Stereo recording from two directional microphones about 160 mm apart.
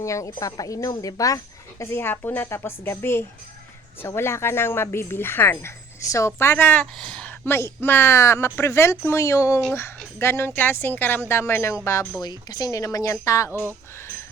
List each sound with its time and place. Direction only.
0.0 s speech: 20° left (ahead or behind)
13.5 s speech: 15° right (ahead or behind)